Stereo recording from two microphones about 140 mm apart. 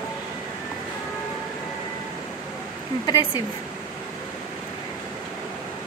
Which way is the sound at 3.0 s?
30° left (ahead or behind).